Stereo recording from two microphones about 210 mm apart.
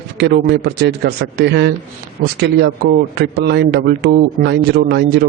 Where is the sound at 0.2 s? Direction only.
50° right (ahead or behind).